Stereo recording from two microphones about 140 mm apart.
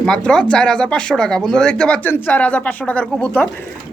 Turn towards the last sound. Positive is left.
turn(degrees=10)  # may be behind; listen again after turning